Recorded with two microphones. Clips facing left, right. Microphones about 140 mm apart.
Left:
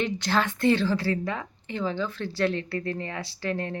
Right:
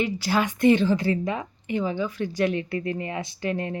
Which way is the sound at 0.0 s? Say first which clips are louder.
Right 2 dB; 10° right (ahead or behind).